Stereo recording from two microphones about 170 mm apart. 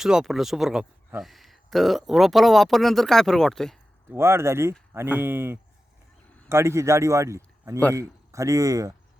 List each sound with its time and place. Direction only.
0.0 s speech: 5° right (ahead or behind)
4.1 s a man's voice: 15° right (ahead or behind)